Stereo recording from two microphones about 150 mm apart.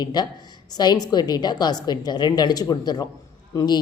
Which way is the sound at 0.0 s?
25° left (ahead or behind).